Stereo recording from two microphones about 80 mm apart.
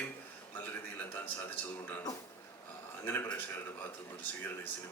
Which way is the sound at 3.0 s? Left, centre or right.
Left.